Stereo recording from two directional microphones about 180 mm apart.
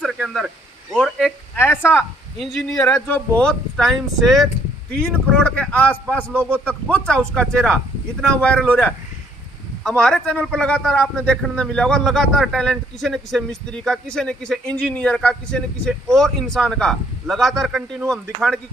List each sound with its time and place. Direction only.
0.0 s a sound: centre (ahead or behind)
1.6 s speech: 10° left (ahead or behind)
2.3 s speech: centre (ahead or behind)
2.8 s a man's voice: 15° left (ahead or behind)